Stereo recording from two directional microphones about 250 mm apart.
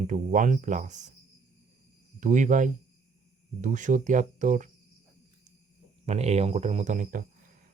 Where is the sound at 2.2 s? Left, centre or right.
Right.